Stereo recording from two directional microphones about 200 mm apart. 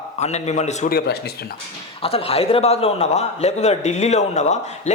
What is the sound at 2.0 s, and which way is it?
A man's voice, 30° left (ahead or behind).